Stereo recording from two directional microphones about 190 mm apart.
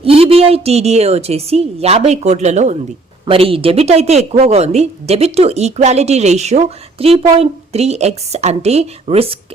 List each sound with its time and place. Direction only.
0.0 s a woman's voice: 30° right (ahead or behind)